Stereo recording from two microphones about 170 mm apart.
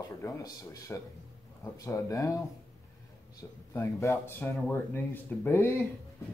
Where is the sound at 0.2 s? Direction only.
15° left (ahead or behind).